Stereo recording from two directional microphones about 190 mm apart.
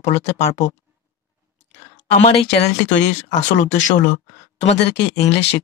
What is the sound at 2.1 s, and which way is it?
Speech, 35° left (ahead or behind).